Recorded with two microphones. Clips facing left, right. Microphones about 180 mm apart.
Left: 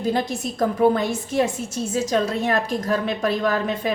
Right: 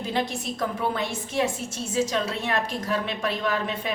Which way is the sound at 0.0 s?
45° left (ahead or behind).